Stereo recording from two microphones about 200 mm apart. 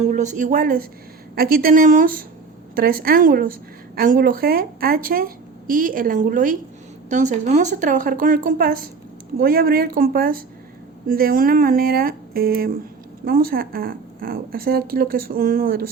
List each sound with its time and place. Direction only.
0.1 s a woman's voice: 40° right (ahead or behind)